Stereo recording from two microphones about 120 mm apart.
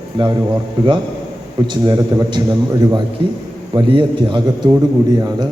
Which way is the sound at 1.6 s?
40° right (ahead or behind).